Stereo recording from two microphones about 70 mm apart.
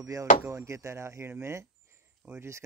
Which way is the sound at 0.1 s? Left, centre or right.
Right.